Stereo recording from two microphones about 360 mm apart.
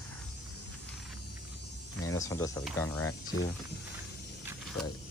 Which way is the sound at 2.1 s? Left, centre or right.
Centre.